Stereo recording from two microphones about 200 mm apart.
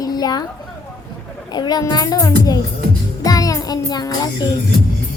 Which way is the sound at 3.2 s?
15° left (ahead or behind).